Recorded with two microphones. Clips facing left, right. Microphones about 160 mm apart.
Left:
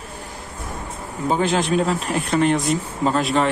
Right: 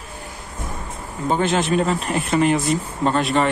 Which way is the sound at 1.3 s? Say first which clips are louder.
Even; centre (ahead or behind).